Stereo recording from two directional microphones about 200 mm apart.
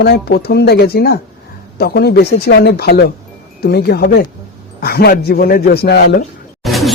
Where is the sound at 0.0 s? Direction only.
50° left (ahead or behind).